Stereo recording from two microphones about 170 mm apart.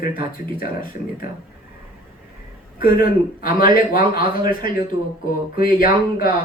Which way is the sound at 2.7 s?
55° left (ahead or behind).